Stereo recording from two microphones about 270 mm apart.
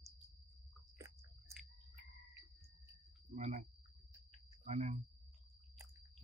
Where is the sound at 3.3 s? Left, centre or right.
Right.